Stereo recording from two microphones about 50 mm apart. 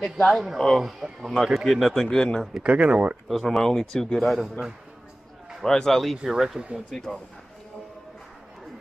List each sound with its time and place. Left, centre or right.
0.3 s speech: centre
0.6 s a man's voice: centre
0.8 s speech: centre
2.6 s speech: right
3.3 s speech: centre
5.6 s speech: centre
6.1 s speech: centre
6.9 s a man's voice: centre